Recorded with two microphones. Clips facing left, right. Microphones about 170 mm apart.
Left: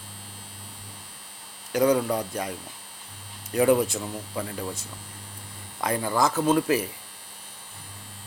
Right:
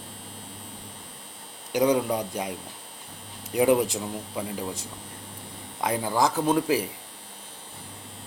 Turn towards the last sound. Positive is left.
turn(degrees=-15)  # may be behind; listen again after turning